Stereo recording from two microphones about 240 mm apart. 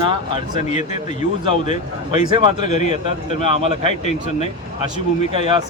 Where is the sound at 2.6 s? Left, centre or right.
Left.